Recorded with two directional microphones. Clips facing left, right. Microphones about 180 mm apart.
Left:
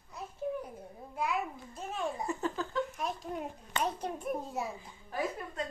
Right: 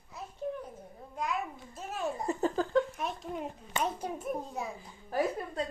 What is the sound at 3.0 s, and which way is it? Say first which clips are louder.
A child's voice: even; centre (ahead or behind).